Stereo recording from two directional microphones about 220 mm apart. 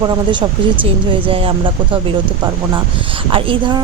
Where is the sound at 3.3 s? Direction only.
25° right (ahead or behind).